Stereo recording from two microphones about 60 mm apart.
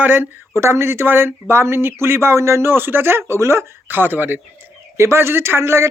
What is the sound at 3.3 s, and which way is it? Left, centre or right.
Speech, right.